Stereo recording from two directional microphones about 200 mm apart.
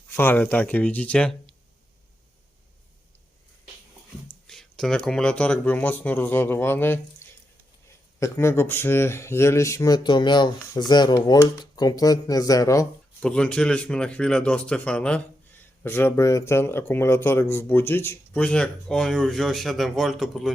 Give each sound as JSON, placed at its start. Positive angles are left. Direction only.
{"t": 0.1, "sound": "speech", "side_deg": 10}
{"t": 4.4, "sound": "speech", "side_deg": 0}
{"t": 13.1, "sound": "speech", "side_deg": 5}